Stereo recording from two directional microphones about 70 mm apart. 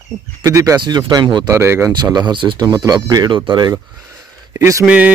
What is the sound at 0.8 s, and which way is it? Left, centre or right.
Speech, right.